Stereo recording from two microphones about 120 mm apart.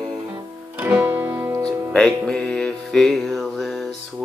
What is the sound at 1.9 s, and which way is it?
Music, 5° left (ahead or behind).